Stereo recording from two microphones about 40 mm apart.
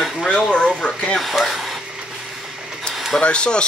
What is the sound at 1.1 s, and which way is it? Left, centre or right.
Speech, centre.